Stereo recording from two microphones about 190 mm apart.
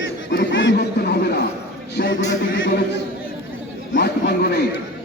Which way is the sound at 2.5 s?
75° left (ahead or behind).